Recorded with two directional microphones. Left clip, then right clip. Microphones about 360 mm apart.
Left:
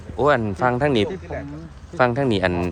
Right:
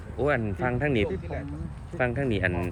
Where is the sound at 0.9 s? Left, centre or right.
Left.